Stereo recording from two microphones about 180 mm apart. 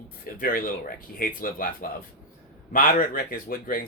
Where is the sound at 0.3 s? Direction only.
50° left (ahead or behind).